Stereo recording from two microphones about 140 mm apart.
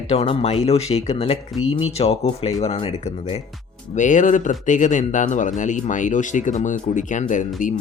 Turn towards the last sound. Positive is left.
turn(degrees=65)  # may be behind; listen again after turning